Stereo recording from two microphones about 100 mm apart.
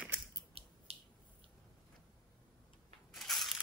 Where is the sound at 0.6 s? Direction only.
80° right.